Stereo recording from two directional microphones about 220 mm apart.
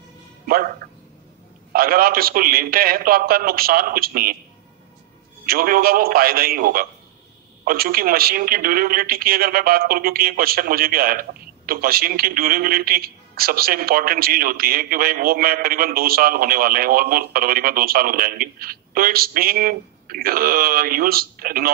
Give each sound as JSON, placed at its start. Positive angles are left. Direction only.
{"t": 0.5, "sound": "a man's voice", "side_deg": -40}
{"t": 5.4, "sound": "a man's voice", "side_deg": -40}